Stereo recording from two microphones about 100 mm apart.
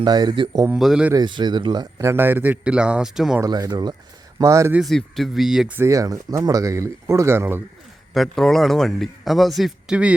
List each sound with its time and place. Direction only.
0.0 s speech: 45° right (ahead or behind)
0.8 s a man's voice: 5° right (ahead or behind)
1.1 s speech: 50° right (ahead or behind)
2.0 s speech: 25° right (ahead or behind); by 3.3 s 5° right (ahead or behind)
3.4 s speech: 40° right (ahead or behind)
4.4 s speech: 30° right (ahead or behind)
4.8 s a man's voice: centre (ahead or behind)
5.7 s speech: 30° right (ahead or behind)
8.1 s a man's voice: centre (ahead or behind)